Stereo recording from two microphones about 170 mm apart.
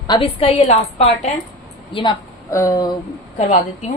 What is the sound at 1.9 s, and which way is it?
A woman's voice, 30° left (ahead or behind).